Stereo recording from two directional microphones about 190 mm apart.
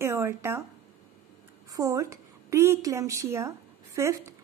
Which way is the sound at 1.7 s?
15° right (ahead or behind).